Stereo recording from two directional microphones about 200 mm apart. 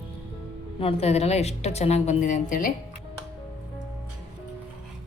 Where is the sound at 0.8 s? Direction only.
30° left (ahead or behind).